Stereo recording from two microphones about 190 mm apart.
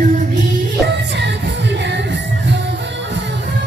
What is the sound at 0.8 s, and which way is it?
Music, 65° right (ahead or behind).